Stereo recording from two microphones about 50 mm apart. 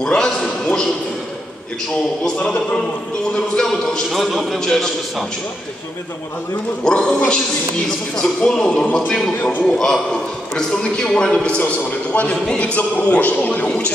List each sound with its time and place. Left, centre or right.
0.0 s a sound: centre
2.3 s a man's voice: left
3.3 s a man's voice: centre
4.1 s a man's voice: centre
6.8 s a man's voice: centre
8.4 s a man's voice: left
9.4 s a man's voice: left
9.7 s a man's voice: centre
11.6 s a man's voice: left